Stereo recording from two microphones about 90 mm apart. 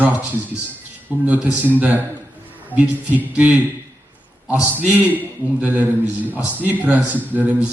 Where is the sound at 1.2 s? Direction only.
15° right (ahead or behind).